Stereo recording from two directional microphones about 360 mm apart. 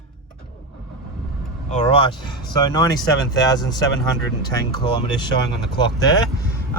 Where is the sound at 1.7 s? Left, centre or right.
Centre.